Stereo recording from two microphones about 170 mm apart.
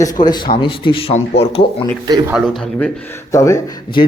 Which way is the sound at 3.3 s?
15° left (ahead or behind).